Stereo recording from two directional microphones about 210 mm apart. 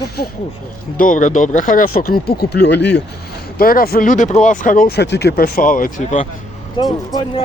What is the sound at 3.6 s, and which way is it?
Speech, 45° left (ahead or behind).